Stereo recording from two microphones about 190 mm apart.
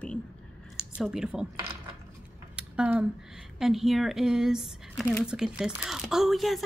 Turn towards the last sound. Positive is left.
turn(degrees=0)  # may be behind; listen again after turning